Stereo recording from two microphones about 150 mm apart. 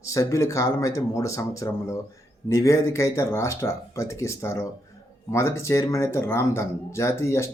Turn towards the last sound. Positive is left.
turn(degrees=20)  # may be behind; listen again after turning